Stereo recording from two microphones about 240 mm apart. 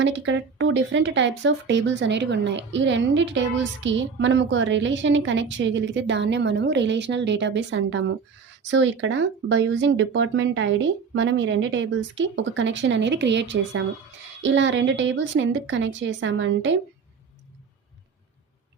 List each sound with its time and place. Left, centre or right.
0.0 s speech: right